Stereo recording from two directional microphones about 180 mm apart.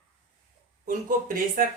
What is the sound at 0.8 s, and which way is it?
Speech, 45° right (ahead or behind).